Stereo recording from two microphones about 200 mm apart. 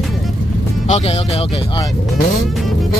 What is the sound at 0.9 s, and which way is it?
Speech, 30° left (ahead or behind).